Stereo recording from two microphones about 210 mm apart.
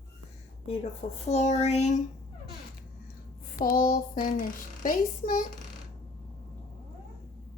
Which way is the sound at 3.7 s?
40° left (ahead or behind).